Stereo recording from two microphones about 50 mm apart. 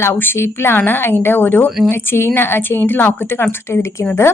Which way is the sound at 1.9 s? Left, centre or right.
Left.